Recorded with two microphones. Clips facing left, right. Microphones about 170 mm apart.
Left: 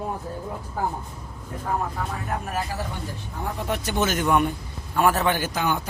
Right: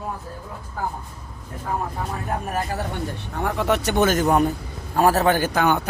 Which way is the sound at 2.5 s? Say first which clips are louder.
Right 3 dB; 60° right (ahead or behind).